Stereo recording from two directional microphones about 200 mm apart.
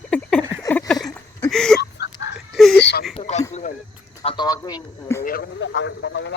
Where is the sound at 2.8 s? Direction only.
60° left (ahead or behind).